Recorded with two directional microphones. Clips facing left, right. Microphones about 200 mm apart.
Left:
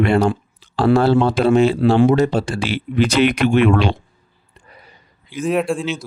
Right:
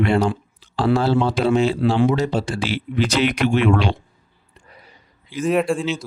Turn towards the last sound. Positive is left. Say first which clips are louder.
# even
turn(degrees=0)  # may be behind; listen again after turning